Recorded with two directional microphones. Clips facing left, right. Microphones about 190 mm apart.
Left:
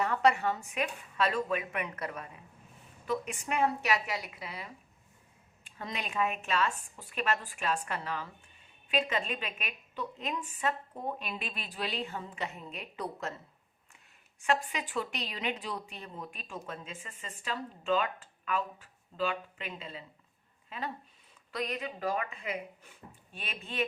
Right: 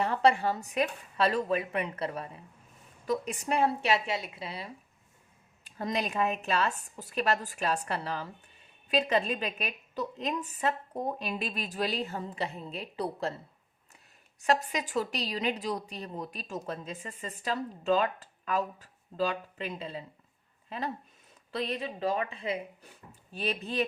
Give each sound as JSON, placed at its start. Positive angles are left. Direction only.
{"t": 0.0, "sound": "a woman's voice", "side_deg": -30}
{"t": 14.4, "sound": "a woman's voice", "side_deg": -40}